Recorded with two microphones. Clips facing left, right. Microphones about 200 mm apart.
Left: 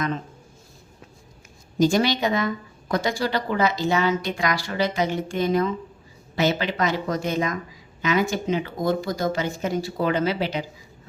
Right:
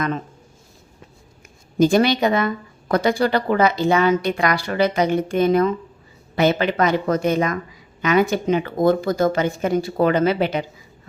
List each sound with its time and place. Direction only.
1.8 s a woman's voice: 55° right (ahead or behind)